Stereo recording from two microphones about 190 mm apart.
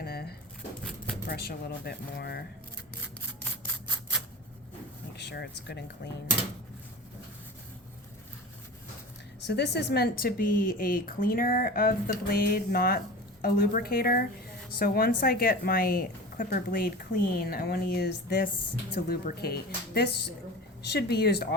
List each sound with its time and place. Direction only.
0.0 s a sound: 55° left (ahead or behind)
1.3 s speech: 55° left (ahead or behind)
5.1 s speech: 60° left (ahead or behind)
9.5 s speech: 60° left (ahead or behind)